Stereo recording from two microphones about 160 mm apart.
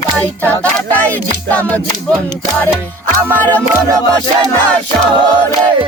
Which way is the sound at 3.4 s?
10° left (ahead or behind).